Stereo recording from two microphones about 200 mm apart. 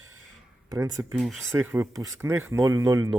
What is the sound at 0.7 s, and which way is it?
Speech, 15° right (ahead or behind).